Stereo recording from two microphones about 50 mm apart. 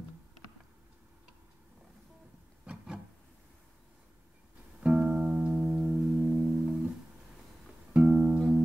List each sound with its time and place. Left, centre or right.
2.6 s wood: right
4.7 s music: right
6.4 s music: centre
7.9 s music: centre